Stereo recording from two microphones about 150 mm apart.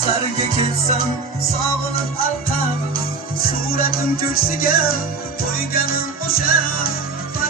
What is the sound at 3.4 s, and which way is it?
Music, 75° left (ahead or behind).